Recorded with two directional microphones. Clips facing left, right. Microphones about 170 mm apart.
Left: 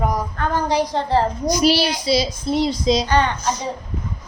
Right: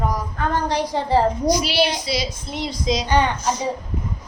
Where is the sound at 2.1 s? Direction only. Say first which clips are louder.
Left 7 dB; 35° left (ahead or behind).